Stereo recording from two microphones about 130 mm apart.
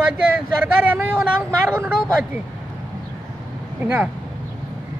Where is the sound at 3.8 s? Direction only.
15° right (ahead or behind).